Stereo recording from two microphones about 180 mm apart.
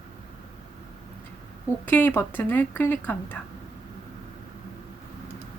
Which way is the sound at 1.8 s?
10° left (ahead or behind).